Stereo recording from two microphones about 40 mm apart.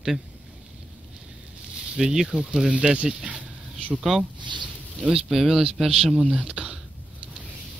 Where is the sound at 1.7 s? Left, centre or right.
Centre.